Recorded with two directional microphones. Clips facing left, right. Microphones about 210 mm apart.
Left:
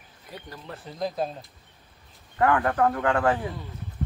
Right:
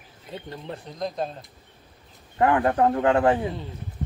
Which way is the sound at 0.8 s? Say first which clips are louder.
Left 2 dB; 5° left (ahead or behind).